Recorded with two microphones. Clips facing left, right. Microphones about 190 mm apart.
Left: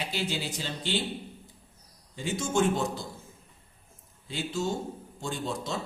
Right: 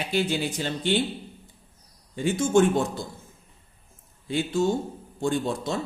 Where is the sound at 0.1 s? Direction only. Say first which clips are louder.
Right 7 dB; 55° right (ahead or behind).